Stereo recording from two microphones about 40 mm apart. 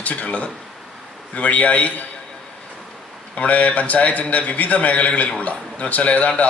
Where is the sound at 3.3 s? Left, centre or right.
Left.